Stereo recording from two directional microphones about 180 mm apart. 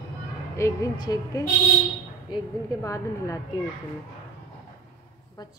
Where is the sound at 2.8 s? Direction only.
20° left (ahead or behind).